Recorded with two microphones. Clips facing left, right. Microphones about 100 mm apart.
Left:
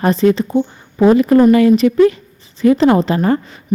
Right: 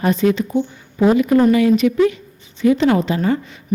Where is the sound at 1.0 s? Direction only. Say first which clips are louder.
Left 4 dB; 40° left (ahead or behind).